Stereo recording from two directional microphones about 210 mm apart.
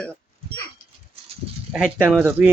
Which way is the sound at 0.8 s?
30° right (ahead or behind).